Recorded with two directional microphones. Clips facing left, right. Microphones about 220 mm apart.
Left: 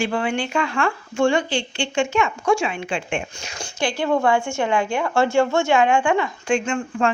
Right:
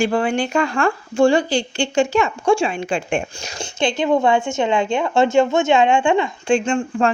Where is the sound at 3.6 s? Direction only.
25° right (ahead or behind).